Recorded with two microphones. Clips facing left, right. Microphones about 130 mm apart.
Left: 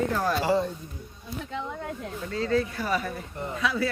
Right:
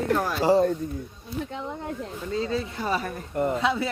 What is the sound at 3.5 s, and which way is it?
Speech, 25° right (ahead or behind).